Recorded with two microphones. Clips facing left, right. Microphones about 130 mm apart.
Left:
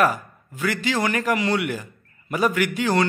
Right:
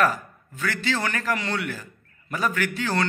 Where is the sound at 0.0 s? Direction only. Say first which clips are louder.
Left 2 dB; 15° left (ahead or behind).